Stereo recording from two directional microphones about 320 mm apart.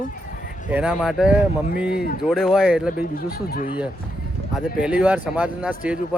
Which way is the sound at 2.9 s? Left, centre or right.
Left.